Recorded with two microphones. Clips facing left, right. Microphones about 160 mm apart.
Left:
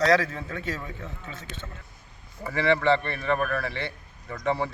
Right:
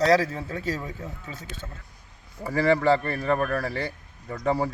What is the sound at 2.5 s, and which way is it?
A man's voice, 40° right (ahead or behind).